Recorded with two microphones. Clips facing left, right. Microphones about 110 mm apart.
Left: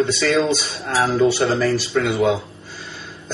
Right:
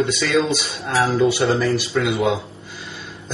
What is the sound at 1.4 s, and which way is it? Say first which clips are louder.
Speech: even; 20° right (ahead or behind).